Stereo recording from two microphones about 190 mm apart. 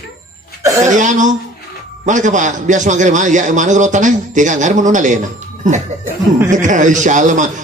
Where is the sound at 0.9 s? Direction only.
40° right (ahead or behind).